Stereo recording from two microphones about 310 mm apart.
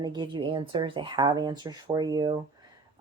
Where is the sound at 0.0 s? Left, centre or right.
Centre.